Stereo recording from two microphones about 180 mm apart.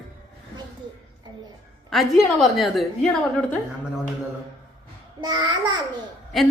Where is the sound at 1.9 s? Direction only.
Centre (ahead or behind).